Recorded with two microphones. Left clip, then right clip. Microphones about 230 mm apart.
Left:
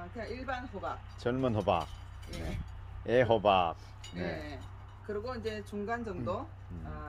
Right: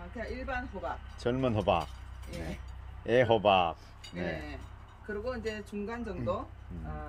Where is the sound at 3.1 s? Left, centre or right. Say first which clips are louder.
Right 1 dB; centre.